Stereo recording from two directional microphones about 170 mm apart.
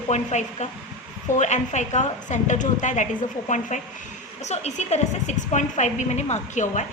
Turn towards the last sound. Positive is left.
turn(degrees=45)  # may be behind; listen again after turning